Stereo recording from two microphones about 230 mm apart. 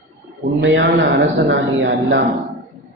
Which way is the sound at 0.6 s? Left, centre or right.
Right.